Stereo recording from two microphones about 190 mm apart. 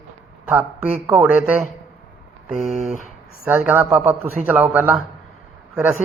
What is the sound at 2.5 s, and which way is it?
Speech, 35° right (ahead or behind).